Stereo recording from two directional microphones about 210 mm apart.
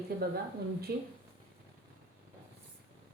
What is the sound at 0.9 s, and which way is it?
Speech, 50° right (ahead or behind).